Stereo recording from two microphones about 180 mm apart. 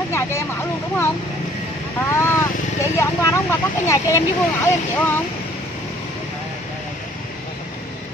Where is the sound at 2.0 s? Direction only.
15° left (ahead or behind).